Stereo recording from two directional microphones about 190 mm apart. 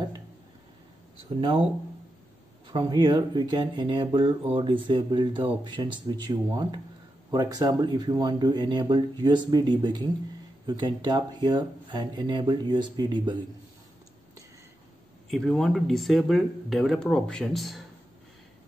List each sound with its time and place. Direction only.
2.7 s speech: 25° right (ahead or behind)
15.2 s speech: centre (ahead or behind)